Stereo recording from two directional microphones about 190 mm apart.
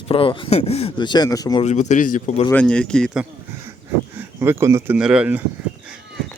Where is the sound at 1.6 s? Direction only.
40° left (ahead or behind).